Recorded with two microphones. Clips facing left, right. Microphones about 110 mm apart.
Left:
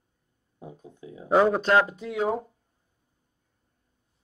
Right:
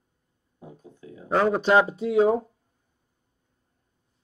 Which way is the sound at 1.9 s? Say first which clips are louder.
Right 7 dB; 25° right (ahead or behind).